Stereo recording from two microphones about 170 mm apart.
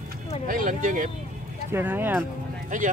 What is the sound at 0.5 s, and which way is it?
Speech, 55° right (ahead or behind).